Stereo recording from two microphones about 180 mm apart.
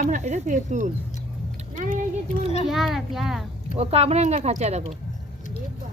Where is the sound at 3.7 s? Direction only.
35° right (ahead or behind).